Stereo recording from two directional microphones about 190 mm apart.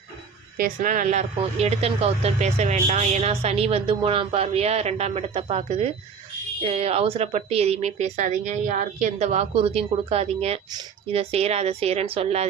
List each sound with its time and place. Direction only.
0.5 s speech: 45° right (ahead or behind); by 12.5 s 30° right (ahead or behind)